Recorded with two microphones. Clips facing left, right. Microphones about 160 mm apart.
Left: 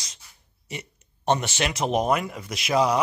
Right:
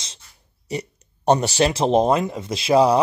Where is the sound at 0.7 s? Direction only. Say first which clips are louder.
Right 9 dB; 35° right (ahead or behind).